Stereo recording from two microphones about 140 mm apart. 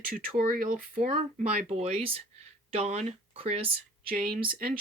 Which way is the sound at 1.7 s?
45° right (ahead or behind).